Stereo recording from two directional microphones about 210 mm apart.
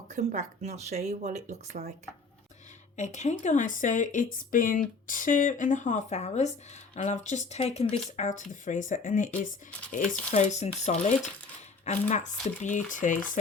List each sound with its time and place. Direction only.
0.1 s speech: 35° right (ahead or behind)
2.9 s speech: 35° left (ahead or behind)